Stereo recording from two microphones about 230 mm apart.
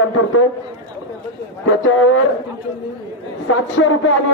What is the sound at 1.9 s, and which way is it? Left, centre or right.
Speech, left.